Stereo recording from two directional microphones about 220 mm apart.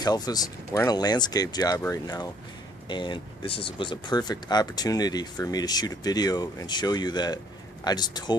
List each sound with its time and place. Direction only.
0.0 s speech: 20° left (ahead or behind)